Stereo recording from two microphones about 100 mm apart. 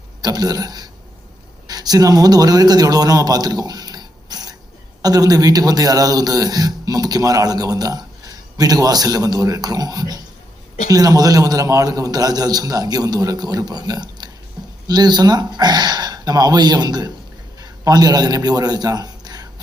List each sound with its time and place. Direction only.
0.2 s a man's voice: 40° right (ahead or behind)